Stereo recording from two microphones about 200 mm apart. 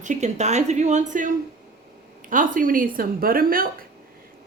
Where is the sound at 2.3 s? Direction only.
40° right (ahead or behind).